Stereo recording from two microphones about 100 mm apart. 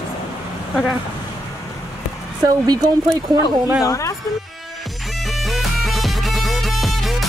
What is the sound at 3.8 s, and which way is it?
Speech, 35° left (ahead or behind).